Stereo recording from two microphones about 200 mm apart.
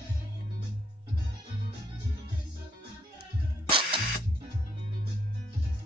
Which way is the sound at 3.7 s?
25° right (ahead or behind).